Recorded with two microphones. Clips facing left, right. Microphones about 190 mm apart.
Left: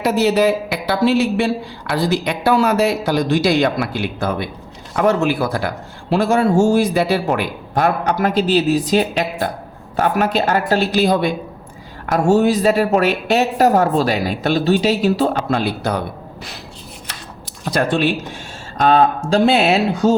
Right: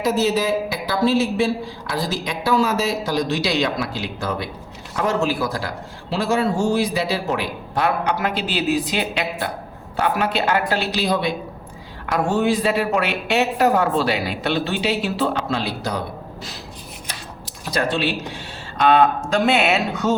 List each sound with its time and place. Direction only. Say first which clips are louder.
0.0 s a woman's voice: left 5 dB; 65° left (ahead or behind)
17.7 s speech: left 4 dB; 50° left (ahead or behind)
18.8 s a woman's voice: left 2 dB; 40° left (ahead or behind)